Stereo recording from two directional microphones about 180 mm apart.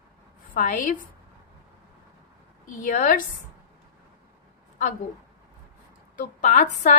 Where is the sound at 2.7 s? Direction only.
45° left (ahead or behind).